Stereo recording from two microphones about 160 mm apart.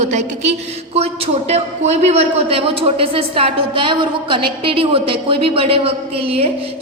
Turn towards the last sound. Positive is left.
turn(degrees=-35)  # may be behind; listen again after turning